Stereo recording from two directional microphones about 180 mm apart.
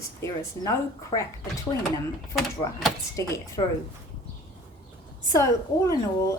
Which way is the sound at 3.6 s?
25° left (ahead or behind).